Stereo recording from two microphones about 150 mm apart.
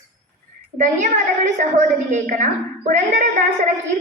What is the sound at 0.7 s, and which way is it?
A woman's voice, 55° right (ahead or behind).